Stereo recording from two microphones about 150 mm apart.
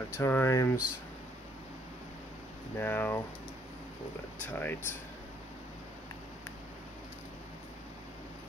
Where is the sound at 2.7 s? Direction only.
15° left (ahead or behind).